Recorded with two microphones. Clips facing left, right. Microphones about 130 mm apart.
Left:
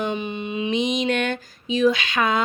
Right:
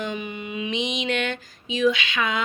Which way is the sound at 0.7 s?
40° left (ahead or behind).